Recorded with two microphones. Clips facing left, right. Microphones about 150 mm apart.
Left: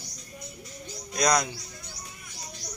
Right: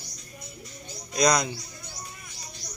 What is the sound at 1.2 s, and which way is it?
Speech, centre (ahead or behind).